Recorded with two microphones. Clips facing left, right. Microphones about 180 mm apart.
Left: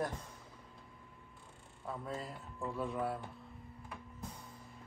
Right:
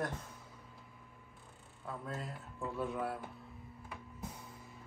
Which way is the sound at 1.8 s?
Centre (ahead or behind).